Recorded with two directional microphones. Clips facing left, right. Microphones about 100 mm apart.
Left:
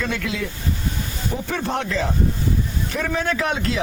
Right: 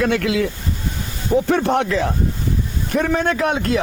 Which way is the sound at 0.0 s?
80° right.